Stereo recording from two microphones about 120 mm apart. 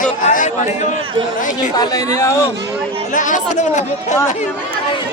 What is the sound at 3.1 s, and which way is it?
Speech, 90° left.